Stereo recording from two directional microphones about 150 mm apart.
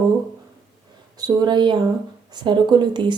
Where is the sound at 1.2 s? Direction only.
30° right (ahead or behind).